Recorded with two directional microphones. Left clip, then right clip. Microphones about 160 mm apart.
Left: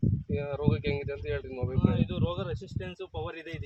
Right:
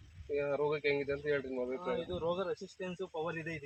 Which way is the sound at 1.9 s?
10° left (ahead or behind).